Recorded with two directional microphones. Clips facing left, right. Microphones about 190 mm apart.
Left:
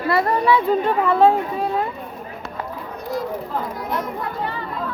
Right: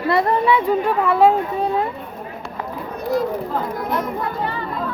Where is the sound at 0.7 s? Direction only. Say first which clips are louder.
Even; 10° right (ahead or behind).